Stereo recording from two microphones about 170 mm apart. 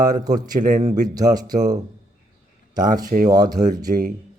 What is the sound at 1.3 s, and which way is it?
Speech, 20° right (ahead or behind).